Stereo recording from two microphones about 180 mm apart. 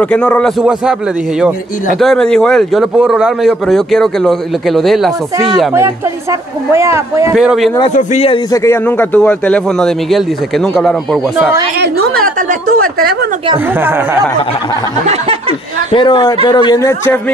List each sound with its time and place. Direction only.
0.0 s a man's voice: 5° left (ahead or behind)
2.0 s a man's voice: centre (ahead or behind)
6.7 s speech: 15° right (ahead or behind)
7.3 s a man's voice: centre (ahead or behind)
7.9 s a man's voice: 35° left (ahead or behind)
8.5 s a man's voice: 10° left (ahead or behind)
11.8 s a woman's voice: 50° right (ahead or behind)
13.7 s speech: 10° right (ahead or behind)
15.9 s speech: 25° left (ahead or behind)